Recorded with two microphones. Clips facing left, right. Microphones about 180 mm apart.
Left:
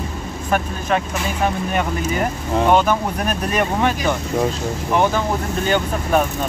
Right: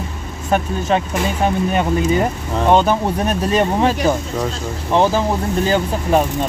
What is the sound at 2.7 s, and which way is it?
Speech, 30° right (ahead or behind).